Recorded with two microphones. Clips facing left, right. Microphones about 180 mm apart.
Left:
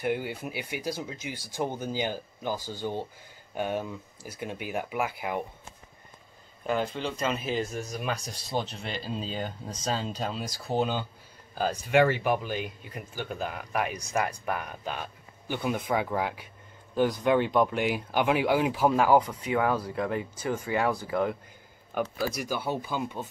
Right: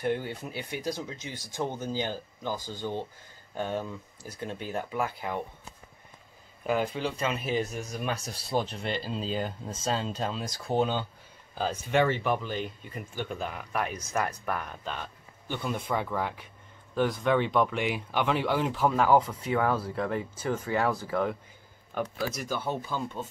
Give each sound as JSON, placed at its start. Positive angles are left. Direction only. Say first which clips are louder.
{"t": 0.0, "sound": "speech", "louder": "even", "side_deg": 5}
{"t": 2.5, "sound": "speech", "louder": "left 1 dB", "side_deg": -15}
{"t": 2.8, "sound": "speech", "louder": "left 1 dB", "side_deg": 10}
{"t": 6.6, "sound": "speech", "louder": "right 1 dB", "side_deg": -5}
{"t": 19.4, "sound": "speech", "louder": "left 1 dB", "side_deg": 15}
{"t": 21.9, "sound": "speech", "louder": "left 2 dB", "side_deg": 5}